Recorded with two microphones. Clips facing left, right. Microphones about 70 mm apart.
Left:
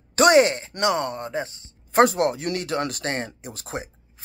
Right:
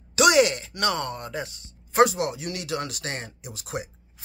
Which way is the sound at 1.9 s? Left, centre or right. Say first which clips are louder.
Left 2 dB; left.